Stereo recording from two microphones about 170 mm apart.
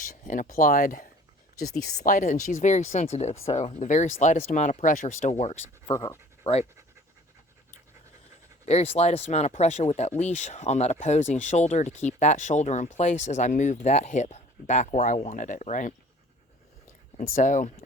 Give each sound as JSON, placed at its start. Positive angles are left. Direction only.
{"t": 0.0, "sound": "speech", "side_deg": 50}
{"t": 5.9, "sound": "speech", "side_deg": 20}
{"t": 6.4, "sound": "speech", "side_deg": 35}
{"t": 8.6, "sound": "speech", "side_deg": 35}
{"t": 17.2, "sound": "speech", "side_deg": 50}